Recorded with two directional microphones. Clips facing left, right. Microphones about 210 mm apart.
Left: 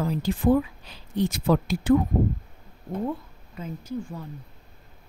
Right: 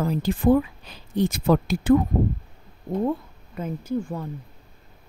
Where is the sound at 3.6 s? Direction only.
55° right (ahead or behind).